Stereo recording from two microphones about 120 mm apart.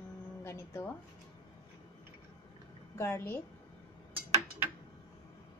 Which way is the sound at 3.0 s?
20° left (ahead or behind).